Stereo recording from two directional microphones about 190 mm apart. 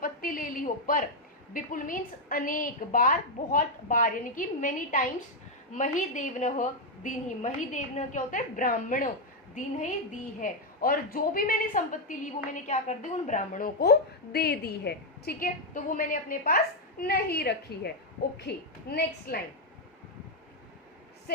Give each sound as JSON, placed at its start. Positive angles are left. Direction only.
{"t": 0.0, "sound": "a woman's voice", "side_deg": 45}
{"t": 10.4, "sound": "a woman's voice", "side_deg": 50}